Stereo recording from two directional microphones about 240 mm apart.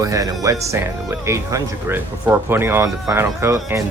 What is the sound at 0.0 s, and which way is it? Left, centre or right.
Speech, centre.